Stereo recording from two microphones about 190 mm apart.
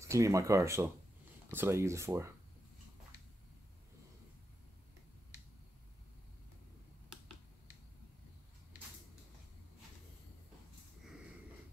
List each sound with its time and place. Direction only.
0.1 s speech: 15° right (ahead or behind)